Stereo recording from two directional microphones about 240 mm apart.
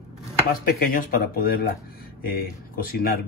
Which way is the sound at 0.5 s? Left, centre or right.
Left.